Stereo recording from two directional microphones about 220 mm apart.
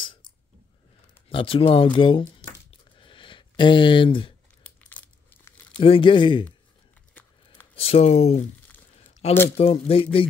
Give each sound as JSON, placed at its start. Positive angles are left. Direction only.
{"t": 1.3, "sound": "speech", "side_deg": 25}
{"t": 3.0, "sound": "a sound", "side_deg": 20}
{"t": 4.6, "sound": "crumpling", "side_deg": 10}
{"t": 5.8, "sound": "speech", "side_deg": 25}
{"t": 7.7, "sound": "speech", "side_deg": 25}
{"t": 8.9, "sound": "a sound", "side_deg": 30}
{"t": 9.6, "sound": "speech", "side_deg": 25}